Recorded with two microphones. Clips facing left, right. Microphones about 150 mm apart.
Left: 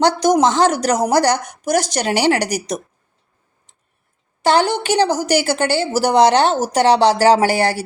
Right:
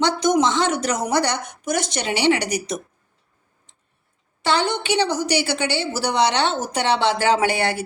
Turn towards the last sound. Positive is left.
turn(degrees=35)  # may be behind; listen again after turning